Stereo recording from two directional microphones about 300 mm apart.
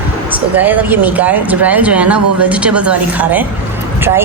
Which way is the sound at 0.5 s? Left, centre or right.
Centre.